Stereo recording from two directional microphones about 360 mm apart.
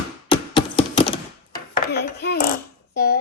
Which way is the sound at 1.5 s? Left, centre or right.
Left.